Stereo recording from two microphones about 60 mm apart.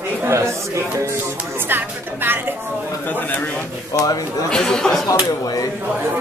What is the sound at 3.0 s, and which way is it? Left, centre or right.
Speech, left.